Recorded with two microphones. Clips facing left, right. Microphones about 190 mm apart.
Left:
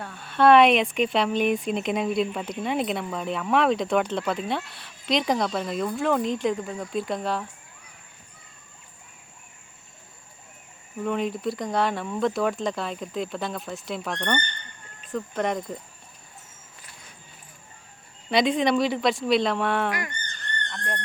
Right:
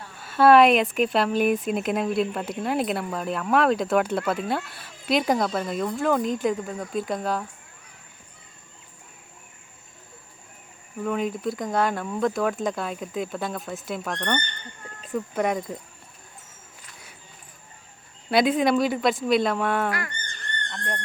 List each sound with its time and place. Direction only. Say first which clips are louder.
0.2 s speech: right 1 dB; 5° right (ahead or behind)
11.0 s speech: even; centre (ahead or behind)
18.3 s speech: right 1 dB; 5° right (ahead or behind)
19.9 s speech: even; 15° left (ahead or behind)